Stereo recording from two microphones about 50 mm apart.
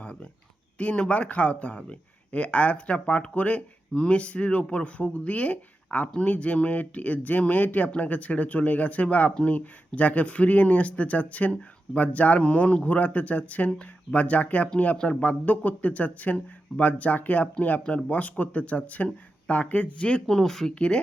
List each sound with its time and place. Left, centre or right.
0.0 s a sound: left
0.8 s speech: left
20.2 s speech: centre
20.7 s speech: left